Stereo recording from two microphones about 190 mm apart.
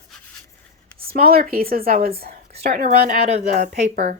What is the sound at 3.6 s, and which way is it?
Speech, 55° right (ahead or behind).